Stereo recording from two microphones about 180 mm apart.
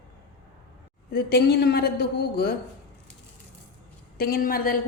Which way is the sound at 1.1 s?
60° left (ahead or behind).